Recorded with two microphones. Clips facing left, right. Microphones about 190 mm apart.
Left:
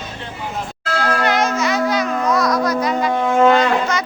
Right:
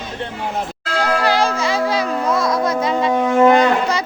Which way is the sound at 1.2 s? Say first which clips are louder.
Even; 30° right (ahead or behind).